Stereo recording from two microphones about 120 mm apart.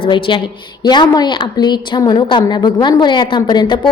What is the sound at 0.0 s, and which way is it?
A woman's voice, 45° left (ahead or behind).